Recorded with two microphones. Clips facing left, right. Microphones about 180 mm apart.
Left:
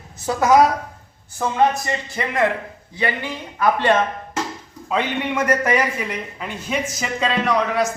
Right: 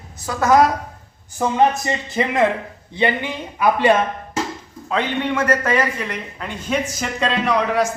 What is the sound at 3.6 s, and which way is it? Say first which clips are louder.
Speech: right 2 dB; 10° right (ahead or behind).